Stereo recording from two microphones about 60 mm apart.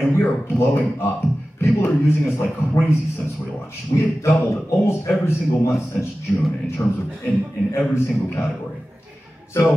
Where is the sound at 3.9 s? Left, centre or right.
Left.